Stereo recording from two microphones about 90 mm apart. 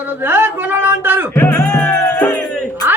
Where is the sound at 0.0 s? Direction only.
25° right (ahead or behind).